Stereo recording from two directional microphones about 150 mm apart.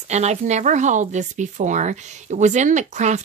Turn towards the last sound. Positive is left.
turn(degrees=-50)  # may be behind; listen again after turning